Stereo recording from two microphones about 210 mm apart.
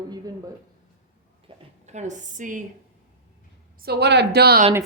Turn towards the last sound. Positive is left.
turn(degrees=-50)  # may be behind; listen again after turning